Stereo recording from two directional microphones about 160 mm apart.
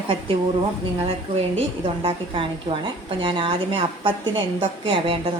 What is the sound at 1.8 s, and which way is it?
A woman's voice, 35° right (ahead or behind).